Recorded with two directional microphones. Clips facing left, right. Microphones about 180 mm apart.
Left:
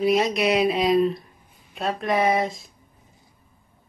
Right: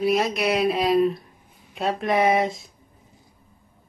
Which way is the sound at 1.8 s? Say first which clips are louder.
Right 1 dB; 25° right (ahead or behind).